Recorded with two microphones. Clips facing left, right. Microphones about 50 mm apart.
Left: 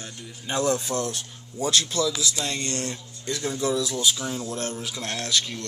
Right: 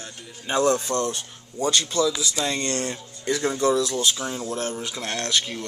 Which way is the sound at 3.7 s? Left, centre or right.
Centre.